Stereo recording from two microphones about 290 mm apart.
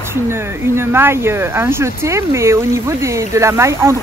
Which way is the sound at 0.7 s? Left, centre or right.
Centre.